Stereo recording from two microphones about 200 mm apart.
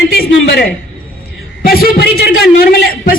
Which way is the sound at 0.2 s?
50° left (ahead or behind).